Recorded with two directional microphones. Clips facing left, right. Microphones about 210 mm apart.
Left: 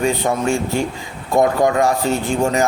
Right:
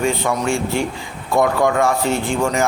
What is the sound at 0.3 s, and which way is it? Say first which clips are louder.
A man's voice: left 1 dB; 40° left (ahead or behind).